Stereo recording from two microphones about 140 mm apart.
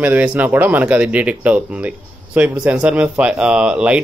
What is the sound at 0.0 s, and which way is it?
Speech, 10° right (ahead or behind).